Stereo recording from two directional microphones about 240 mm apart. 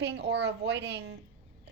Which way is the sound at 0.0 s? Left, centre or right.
Right.